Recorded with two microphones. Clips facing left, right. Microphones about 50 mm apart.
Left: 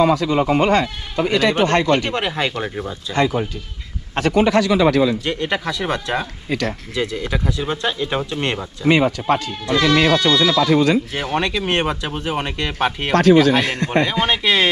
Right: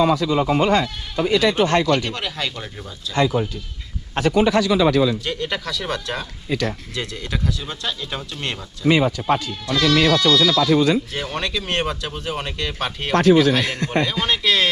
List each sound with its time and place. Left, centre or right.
0.0 s speech: left
2.0 s speech: left
3.2 s speech: left
5.2 s speech: left
6.5 s speech: left
6.9 s speech: centre
7.5 s speech: left
8.9 s speech: left
9.5 s speech: left
10.7 s speech: left
11.1 s speech: left
13.7 s a man's voice: left
14.1 s speech: left